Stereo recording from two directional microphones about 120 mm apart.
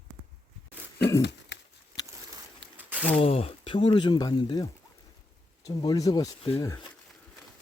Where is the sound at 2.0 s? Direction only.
30° left (ahead or behind).